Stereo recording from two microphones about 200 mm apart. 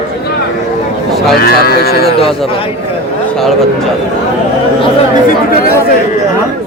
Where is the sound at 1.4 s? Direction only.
50° left (ahead or behind).